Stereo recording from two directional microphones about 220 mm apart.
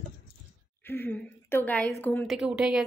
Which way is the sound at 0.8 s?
10° left (ahead or behind).